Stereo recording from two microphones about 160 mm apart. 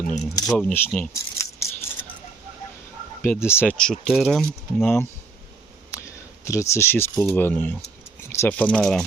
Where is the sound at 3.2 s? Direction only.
15° left (ahead or behind).